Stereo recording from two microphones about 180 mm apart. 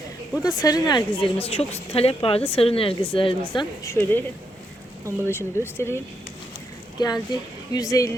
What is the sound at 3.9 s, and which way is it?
Speech, 10° left (ahead or behind).